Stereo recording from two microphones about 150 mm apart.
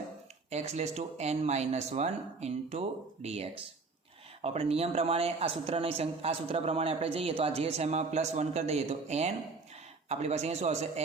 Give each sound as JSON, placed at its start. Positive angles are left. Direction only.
{"t": 0.5, "sound": "speech", "side_deg": -45}